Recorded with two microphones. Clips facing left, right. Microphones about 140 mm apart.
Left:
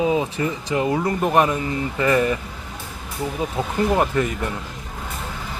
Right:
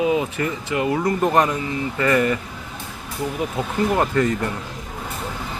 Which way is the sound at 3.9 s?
15° left (ahead or behind).